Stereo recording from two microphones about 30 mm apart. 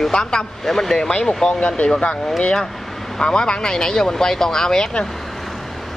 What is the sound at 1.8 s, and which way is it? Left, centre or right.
Speech, left.